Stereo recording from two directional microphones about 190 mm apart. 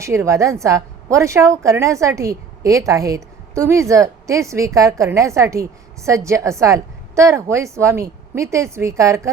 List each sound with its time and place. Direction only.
0.0 s a woman's voice: 15° right (ahead or behind)